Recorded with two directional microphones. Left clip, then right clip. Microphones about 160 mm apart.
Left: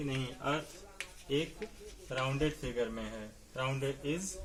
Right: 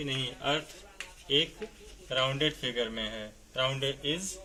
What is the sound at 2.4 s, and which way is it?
A man's voice, 25° left (ahead or behind).